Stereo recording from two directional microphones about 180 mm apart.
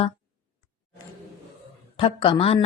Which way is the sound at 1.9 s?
30° left (ahead or behind).